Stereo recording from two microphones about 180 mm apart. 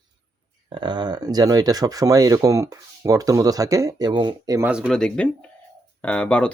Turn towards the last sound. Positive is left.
turn(degrees=5)  # may be behind; listen again after turning